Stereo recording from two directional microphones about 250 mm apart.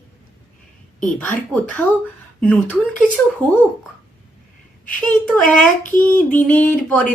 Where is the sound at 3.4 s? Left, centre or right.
Centre.